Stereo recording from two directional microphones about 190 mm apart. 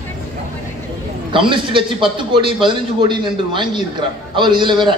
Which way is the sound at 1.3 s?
25° right (ahead or behind).